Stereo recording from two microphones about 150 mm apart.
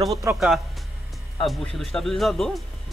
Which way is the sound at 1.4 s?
Centre (ahead or behind).